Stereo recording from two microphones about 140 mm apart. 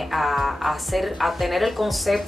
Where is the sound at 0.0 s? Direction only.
Centre (ahead or behind).